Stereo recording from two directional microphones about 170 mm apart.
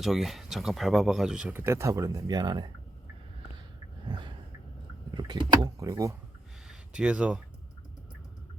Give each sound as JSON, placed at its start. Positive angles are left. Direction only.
{"t": 0.0, "sound": "speech", "side_deg": 0}
{"t": 4.0, "sound": "a sound", "side_deg": -25}
{"t": 5.1, "sound": "speech", "side_deg": -25}
{"t": 6.7, "sound": "speech", "side_deg": -5}